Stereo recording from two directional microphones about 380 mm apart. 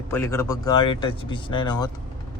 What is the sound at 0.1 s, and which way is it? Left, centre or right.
Speech, centre.